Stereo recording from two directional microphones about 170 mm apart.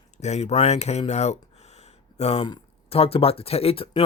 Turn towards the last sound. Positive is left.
turn(degrees=35)  # may be behind; listen again after turning